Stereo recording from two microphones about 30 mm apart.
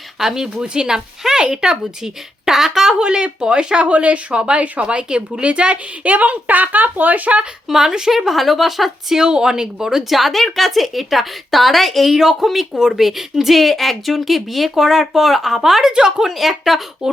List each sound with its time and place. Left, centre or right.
0.2 s speech: centre
0.6 s a woman's voice: right; by 2.9 s centre
3.0 s speech: right
3.8 s speech: right
4.4 s speech: right
5.4 s a woman's voice: right
7.7 s speech: centre
8.3 s a woman's voice: centre
9.1 s a woman's voice: right
10.1 s a woman's voice: centre
14.8 s speech: centre
15.9 s a woman's voice: right
16.3 s a woman's voice: centre